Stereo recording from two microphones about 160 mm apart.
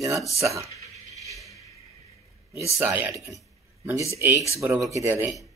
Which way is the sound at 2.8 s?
15° right (ahead or behind).